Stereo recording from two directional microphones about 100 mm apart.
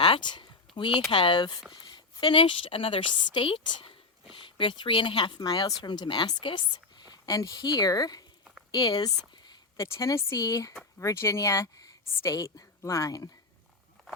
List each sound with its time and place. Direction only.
0.0 s a sound: 55° left (ahead or behind)
1.1 s a woman's voice: 55° left (ahead or behind)
5.5 s a woman's voice: 40° left (ahead or behind)
9.7 s speech: 30° left (ahead or behind)